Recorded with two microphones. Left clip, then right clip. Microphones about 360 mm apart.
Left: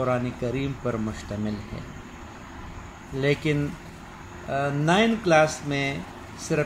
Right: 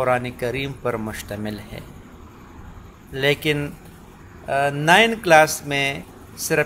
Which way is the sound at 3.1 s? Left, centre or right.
Right.